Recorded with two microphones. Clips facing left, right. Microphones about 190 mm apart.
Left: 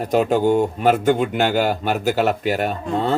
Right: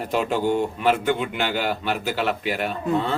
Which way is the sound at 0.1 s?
45° left (ahead or behind).